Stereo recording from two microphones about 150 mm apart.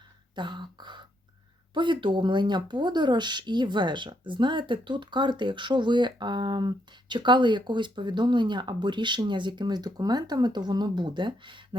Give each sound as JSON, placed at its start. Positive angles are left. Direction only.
{"t": 0.3, "sound": "speech", "side_deg": -30}